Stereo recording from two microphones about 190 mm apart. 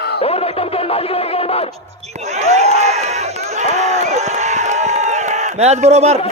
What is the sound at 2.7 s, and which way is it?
Crowd, 35° right (ahead or behind).